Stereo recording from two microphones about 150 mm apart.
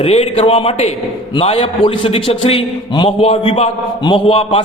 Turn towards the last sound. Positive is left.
turn(degrees=40)  # may be behind; listen again after turning